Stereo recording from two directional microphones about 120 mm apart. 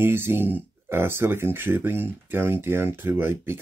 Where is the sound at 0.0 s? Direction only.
20° right (ahead or behind).